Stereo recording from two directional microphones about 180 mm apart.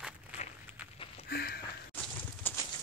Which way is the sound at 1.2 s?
55° left (ahead or behind).